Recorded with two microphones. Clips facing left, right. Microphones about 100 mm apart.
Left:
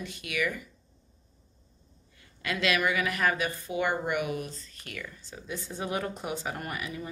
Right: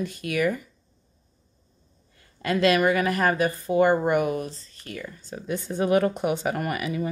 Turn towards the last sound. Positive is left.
turn(degrees=-80)